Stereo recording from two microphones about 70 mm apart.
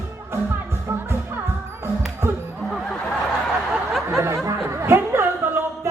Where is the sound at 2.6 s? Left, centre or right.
Centre.